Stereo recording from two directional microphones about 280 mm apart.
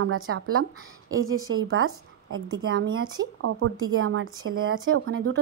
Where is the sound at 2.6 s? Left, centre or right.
Right.